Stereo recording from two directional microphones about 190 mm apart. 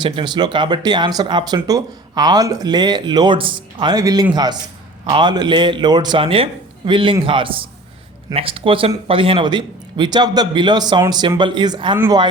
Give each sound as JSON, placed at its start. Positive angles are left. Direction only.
{"t": 0.0, "sound": "speech", "side_deg": -25}